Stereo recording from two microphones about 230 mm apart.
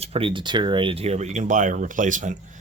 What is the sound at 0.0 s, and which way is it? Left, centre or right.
Speech, right.